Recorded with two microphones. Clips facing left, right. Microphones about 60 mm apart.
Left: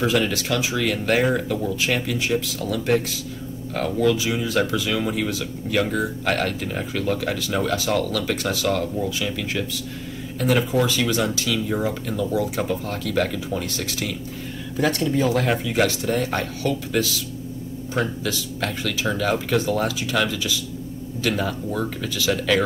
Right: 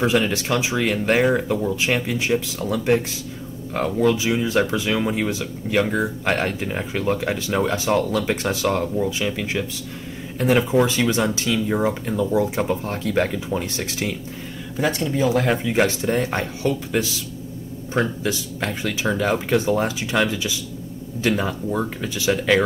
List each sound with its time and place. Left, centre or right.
0.0 s speech: right
15.3 s a man's voice: centre
15.6 s speech: right